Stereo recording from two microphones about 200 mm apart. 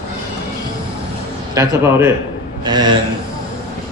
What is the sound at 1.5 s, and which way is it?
A man's voice, 10° right (ahead or behind).